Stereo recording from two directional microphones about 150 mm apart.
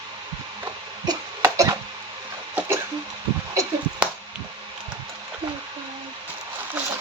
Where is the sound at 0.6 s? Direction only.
25° right (ahead or behind).